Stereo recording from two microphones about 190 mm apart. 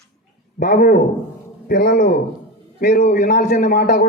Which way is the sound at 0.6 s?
55° left (ahead or behind).